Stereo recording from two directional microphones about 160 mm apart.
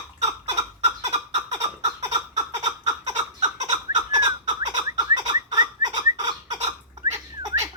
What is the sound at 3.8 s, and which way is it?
Bird, 25° right (ahead or behind).